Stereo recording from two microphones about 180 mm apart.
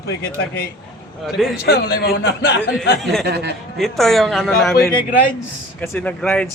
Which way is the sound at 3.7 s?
Centre (ahead or behind).